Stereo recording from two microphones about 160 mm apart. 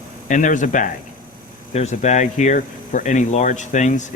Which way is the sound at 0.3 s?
55° left (ahead or behind).